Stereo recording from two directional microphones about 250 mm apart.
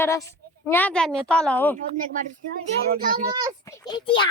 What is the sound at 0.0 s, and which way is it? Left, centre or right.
Speech, centre.